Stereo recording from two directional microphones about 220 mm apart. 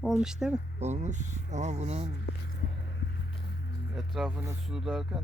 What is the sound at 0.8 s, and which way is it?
Speech, 30° right (ahead or behind).